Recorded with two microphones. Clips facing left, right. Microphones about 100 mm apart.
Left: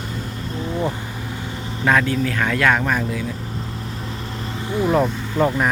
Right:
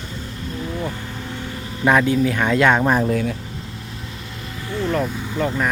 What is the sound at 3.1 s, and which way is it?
Speech, 55° right (ahead or behind).